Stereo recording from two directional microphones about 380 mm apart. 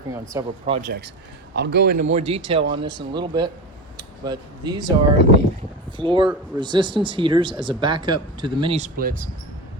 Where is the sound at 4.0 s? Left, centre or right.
Centre.